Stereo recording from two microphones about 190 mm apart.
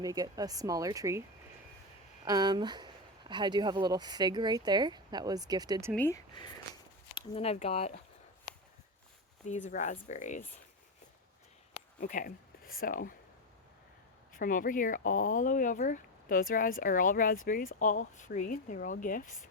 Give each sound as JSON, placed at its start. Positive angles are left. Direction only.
{"t": 0.0, "sound": "speech", "side_deg": -20}
{"t": 2.2, "sound": "speech", "side_deg": -20}
{"t": 5.9, "sound": "speech", "side_deg": 10}
{"t": 7.2, "sound": "speech", "side_deg": 30}
{"t": 9.5, "sound": "speech", "side_deg": 40}
{"t": 11.9, "sound": "a sound", "side_deg": 45}
{"t": 12.8, "sound": "speech", "side_deg": 45}
{"t": 14.3, "sound": "speech", "side_deg": 45}